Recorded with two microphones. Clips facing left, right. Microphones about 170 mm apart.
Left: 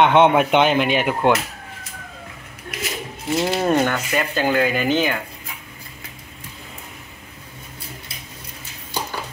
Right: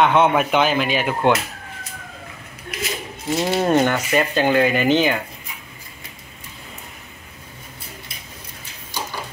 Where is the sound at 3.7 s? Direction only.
15° right (ahead or behind).